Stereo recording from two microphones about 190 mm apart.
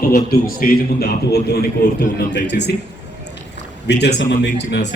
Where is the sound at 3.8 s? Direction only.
65° left (ahead or behind).